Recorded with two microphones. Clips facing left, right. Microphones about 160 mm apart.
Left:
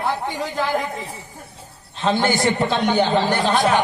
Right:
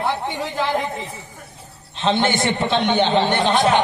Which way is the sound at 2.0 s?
25° right (ahead or behind).